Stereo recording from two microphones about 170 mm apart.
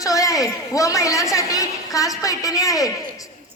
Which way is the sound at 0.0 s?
20° left (ahead or behind).